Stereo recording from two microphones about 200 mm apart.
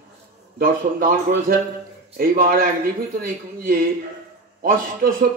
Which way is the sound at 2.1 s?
50° right (ahead or behind).